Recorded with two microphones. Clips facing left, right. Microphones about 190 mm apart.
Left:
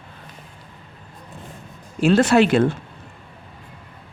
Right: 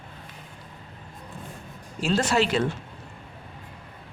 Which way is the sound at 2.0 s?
60° left (ahead or behind).